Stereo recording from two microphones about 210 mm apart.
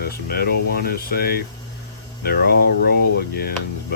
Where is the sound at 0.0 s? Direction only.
45° left (ahead or behind).